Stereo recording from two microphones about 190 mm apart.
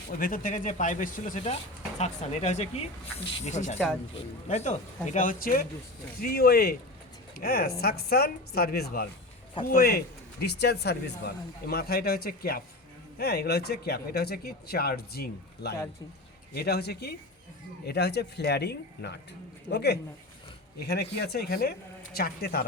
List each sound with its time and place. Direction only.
0.2 s a man's voice: 45° left (ahead or behind)